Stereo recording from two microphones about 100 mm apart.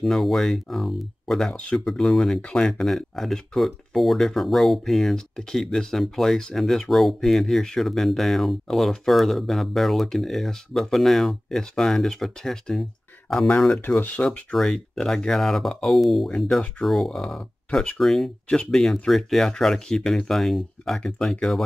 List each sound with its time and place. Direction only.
0.0 s speech: centre (ahead or behind)
13.7 s speech: 20° left (ahead or behind)
14.3 s speech: 5° left (ahead or behind)